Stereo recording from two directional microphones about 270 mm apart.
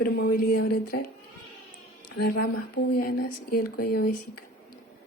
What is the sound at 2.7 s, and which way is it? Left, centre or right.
Speech, left.